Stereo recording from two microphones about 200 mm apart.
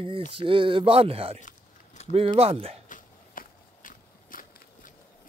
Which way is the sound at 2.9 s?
40° left (ahead or behind).